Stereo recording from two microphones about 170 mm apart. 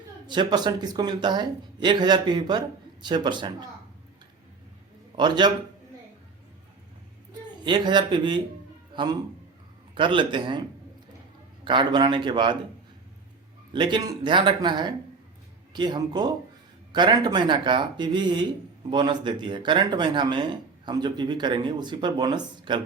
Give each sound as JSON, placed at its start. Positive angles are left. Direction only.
{"t": 0.3, "sound": "speech", "side_deg": -25}
{"t": 5.1, "sound": "speech", "side_deg": -25}
{"t": 7.6, "sound": "speech", "side_deg": -25}
{"t": 8.9, "sound": "a sound", "side_deg": -25}
{"t": 9.9, "sound": "speech", "side_deg": -30}
{"t": 11.6, "sound": "speech", "side_deg": -30}
{"t": 13.7, "sound": "speech", "side_deg": -25}